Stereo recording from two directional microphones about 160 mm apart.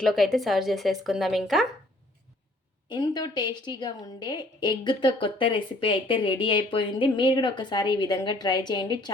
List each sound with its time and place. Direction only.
0.0 s speech: centre (ahead or behind)
2.9 s a woman's voice: 25° left (ahead or behind)